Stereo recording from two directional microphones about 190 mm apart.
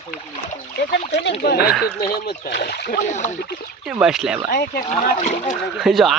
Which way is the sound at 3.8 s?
5° right (ahead or behind).